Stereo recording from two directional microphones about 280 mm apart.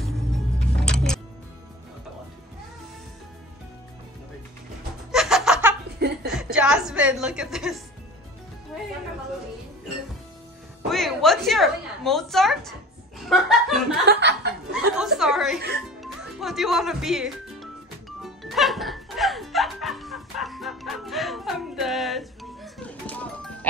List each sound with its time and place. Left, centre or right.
0.7 s music: centre
5.1 s laughter: centre
6.2 s a woman's voice: centre
10.9 s a woman's voice: centre
13.2 s laughter: centre
14.0 s speech: right
14.7 s chuckle: centre
16.0 s music: centre